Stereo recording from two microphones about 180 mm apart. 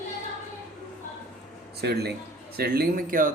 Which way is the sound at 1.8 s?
65° right (ahead or behind).